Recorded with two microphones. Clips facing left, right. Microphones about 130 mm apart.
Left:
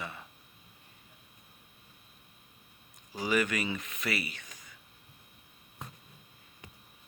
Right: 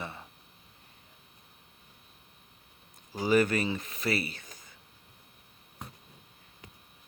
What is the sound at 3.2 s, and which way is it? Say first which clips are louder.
Speech: right 5 dB; 35° right (ahead or behind).